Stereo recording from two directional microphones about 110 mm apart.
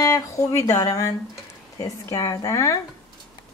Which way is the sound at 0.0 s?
30° left (ahead or behind).